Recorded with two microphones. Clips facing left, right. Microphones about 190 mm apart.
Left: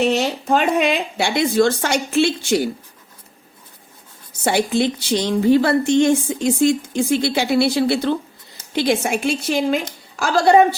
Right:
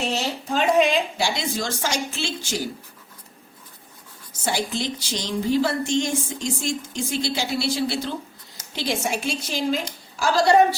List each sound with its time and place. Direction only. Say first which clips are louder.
0.0 s a woman's voice: left 8 dB; 60° left (ahead or behind)
4.4 s a woman's voice: left 8 dB; 60° left (ahead or behind)